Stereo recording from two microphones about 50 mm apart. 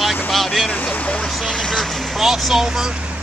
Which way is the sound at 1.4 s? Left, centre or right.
Centre.